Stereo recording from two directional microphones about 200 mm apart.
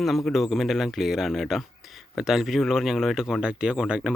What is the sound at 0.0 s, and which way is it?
Speech, centre (ahead or behind).